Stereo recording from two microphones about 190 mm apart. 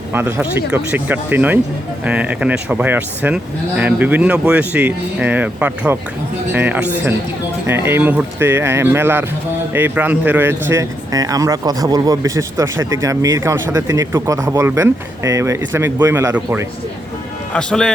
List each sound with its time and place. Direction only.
0.1 s a man's voice: 10° right (ahead or behind)
17.5 s a man's voice: 5° left (ahead or behind)